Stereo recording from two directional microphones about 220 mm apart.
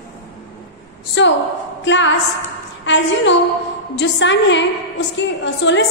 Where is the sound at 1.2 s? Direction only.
55° left (ahead or behind).